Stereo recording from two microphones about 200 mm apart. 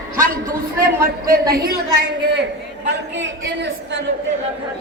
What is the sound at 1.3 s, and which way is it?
Speech, 50° right (ahead or behind).